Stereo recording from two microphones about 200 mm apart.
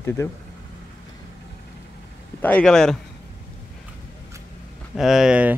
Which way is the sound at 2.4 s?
5° left (ahead or behind).